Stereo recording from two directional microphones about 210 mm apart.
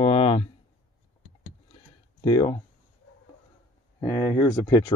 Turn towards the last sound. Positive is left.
turn(degrees=20)  # may be behind; listen again after turning